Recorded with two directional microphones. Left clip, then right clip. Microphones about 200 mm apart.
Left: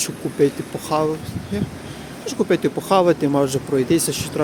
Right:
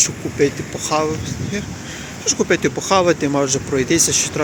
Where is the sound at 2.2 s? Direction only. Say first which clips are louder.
Right 2 dB; 5° left (ahead or behind).